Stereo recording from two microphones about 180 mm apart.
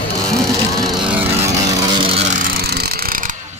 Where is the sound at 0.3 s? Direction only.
20° right (ahead or behind).